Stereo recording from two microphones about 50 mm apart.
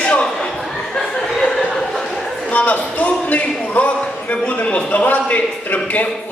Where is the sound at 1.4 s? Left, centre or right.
Centre.